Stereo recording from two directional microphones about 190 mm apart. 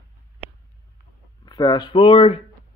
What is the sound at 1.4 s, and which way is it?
Speech, 20° left (ahead or behind).